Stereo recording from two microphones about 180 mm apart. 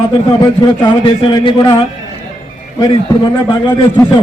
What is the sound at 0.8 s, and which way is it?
Speech, 25° left (ahead or behind).